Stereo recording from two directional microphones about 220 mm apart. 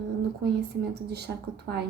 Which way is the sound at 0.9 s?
50° right (ahead or behind).